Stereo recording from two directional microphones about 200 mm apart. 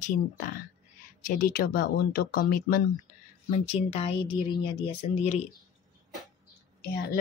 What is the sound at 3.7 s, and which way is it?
A woman's voice, 30° left (ahead or behind).